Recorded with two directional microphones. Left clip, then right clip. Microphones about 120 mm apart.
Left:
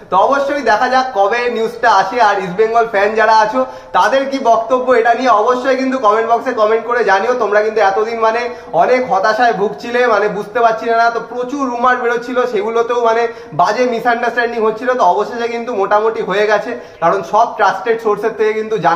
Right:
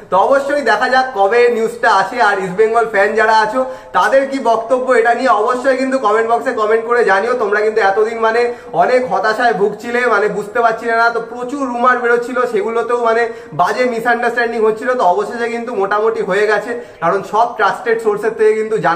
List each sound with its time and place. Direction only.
0.1 s a man's voice: 25° left (ahead or behind)
17.6 s a man's voice: 25° left (ahead or behind)